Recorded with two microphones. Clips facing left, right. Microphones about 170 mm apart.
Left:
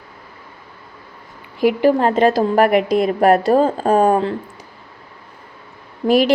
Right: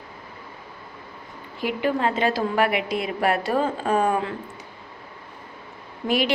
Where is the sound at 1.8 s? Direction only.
40° left (ahead or behind).